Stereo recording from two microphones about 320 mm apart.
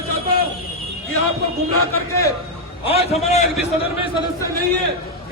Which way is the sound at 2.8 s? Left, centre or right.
Centre.